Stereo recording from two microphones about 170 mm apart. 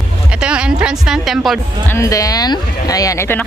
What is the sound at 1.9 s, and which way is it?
Speech, 20° left (ahead or behind).